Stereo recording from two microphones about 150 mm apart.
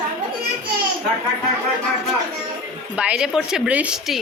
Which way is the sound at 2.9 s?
10° right (ahead or behind).